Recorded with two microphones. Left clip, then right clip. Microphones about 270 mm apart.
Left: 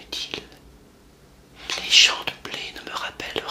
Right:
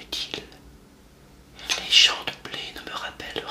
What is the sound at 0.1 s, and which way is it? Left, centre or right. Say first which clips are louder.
Whispering: even; centre.